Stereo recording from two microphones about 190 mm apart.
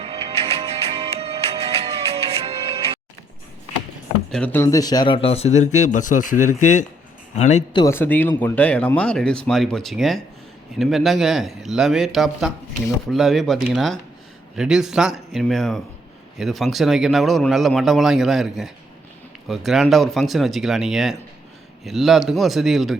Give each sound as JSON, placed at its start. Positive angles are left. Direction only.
{"t": 0.0, "sound": "music", "side_deg": -35}
{"t": 4.3, "sound": "speech", "side_deg": 5}
{"t": 7.7, "sound": "speech", "side_deg": 25}
{"t": 7.9, "sound": "speech", "side_deg": 10}